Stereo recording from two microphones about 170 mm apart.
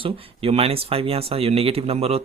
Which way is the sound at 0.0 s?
35° right (ahead or behind).